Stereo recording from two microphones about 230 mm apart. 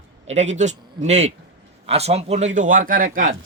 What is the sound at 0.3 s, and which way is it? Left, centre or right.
Speech, right.